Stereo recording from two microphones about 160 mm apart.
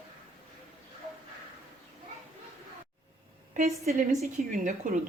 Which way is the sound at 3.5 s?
45° right (ahead or behind).